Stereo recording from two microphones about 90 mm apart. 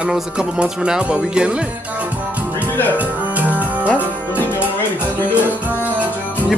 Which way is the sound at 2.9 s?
15° right (ahead or behind).